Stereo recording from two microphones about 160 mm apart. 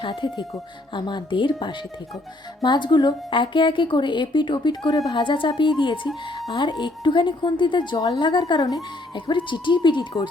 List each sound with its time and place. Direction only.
0.0 s a woman's voice: 30° left (ahead or behind)